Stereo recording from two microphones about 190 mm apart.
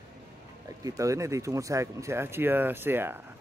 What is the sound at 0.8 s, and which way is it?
Speech, 15° right (ahead or behind).